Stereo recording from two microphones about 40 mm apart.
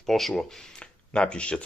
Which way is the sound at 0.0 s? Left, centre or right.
Centre.